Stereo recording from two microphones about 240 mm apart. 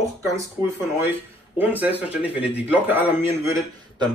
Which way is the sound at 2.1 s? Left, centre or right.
Centre.